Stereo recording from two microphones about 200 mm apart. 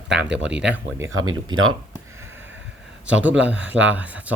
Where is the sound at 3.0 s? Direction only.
5° right (ahead or behind).